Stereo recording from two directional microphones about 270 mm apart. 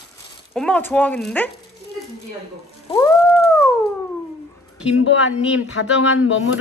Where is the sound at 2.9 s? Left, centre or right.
Centre.